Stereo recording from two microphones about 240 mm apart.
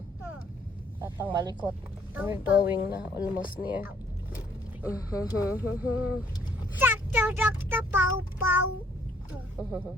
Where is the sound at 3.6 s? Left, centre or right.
Centre.